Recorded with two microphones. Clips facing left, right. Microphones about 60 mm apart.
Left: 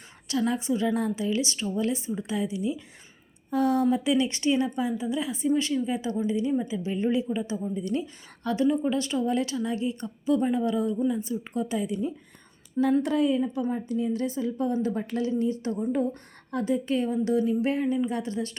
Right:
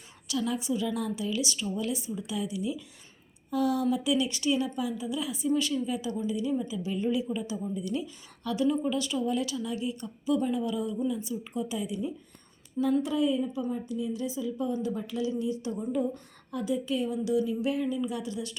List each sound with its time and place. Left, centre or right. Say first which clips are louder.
0.3 s a woman's voice: left 4 dB; left
7.8 s a woman's voice: left 3 dB; left